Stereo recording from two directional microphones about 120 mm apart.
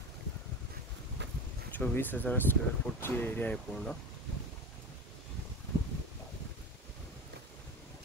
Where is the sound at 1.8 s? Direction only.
15° left (ahead or behind).